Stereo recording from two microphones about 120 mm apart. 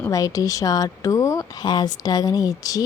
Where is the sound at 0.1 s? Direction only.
30° left (ahead or behind).